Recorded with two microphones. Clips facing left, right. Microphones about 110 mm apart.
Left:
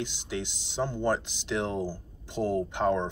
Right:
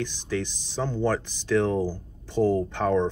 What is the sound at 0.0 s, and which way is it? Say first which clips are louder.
Speech: right 5 dB; 15° left (ahead or behind).